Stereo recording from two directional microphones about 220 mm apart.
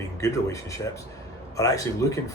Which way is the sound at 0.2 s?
15° left (ahead or behind).